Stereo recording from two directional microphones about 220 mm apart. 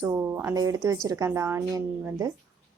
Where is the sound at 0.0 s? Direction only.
10° right (ahead or behind).